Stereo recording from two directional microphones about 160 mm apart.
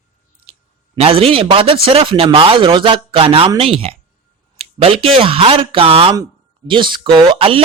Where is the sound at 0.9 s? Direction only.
40° right (ahead or behind).